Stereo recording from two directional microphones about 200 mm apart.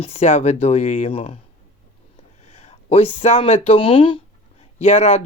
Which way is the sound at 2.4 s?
35° left (ahead or behind).